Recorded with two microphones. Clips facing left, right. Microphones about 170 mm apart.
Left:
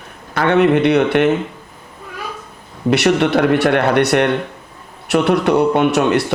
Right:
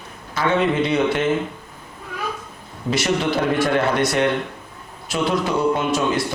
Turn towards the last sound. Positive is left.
turn(degrees=65)  # may be behind; listen again after turning